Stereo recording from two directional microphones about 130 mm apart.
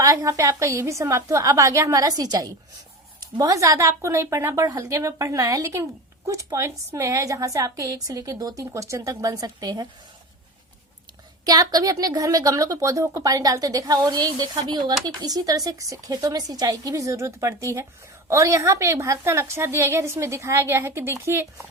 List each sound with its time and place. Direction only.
0.0 s a woman's voice: 25° right (ahead or behind)
11.4 s a woman's voice: 30° right (ahead or behind)